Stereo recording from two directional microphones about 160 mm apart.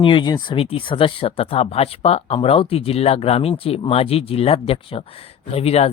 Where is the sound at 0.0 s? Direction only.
30° left (ahead or behind).